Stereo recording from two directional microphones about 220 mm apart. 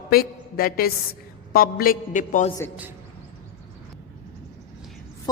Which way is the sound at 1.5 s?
40° left (ahead or behind).